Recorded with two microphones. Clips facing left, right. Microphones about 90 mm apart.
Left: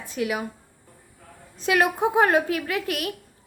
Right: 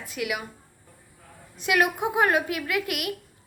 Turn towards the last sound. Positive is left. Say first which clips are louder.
# left 1 dB
turn(degrees=35)  # may be behind; listen again after turning